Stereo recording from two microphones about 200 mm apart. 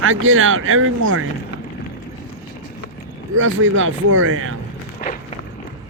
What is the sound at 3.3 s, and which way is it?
Speech, 75° right (ahead or behind).